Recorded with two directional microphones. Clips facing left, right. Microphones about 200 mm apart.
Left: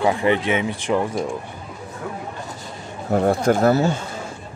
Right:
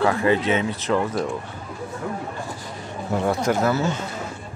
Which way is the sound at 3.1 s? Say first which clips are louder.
Left 4 dB; 50° left (ahead or behind).